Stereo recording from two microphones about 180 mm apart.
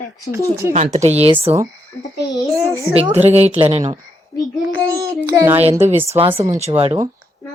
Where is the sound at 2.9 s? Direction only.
35° right (ahead or behind).